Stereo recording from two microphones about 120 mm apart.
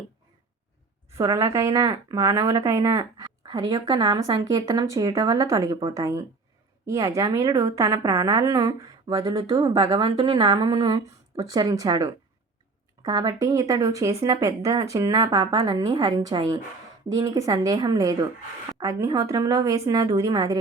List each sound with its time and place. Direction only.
1.1 s a woman's voice: 25° right (ahead or behind)
10.0 s a woman's voice: 50° right (ahead or behind)
10.7 s speech: 30° right (ahead or behind)
13.1 s a woman's voice: 35° right (ahead or behind)